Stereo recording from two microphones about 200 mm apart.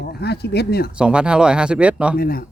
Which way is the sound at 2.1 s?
45° left (ahead or behind).